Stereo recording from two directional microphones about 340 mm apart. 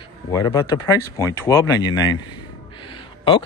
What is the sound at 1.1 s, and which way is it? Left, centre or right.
Speech, centre.